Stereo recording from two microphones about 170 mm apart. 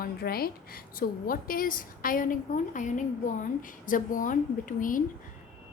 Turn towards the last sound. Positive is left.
turn(degrees=50)  # may be behind; listen again after turning